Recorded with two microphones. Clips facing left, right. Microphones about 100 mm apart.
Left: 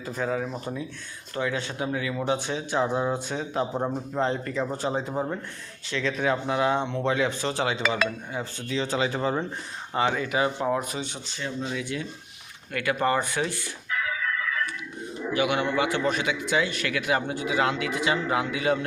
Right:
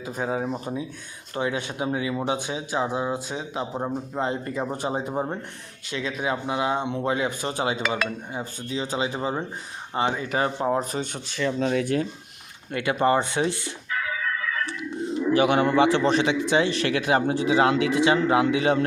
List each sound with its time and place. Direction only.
0.0 s a man's voice: 15° right (ahead or behind)
10.3 s a man's voice: 35° right (ahead or behind)
11.3 s speech: 90° right
11.7 s speech: 50° right (ahead or behind)
12.7 s speech: 25° right (ahead or behind)
15.3 s a man's voice: 35° right (ahead or behind)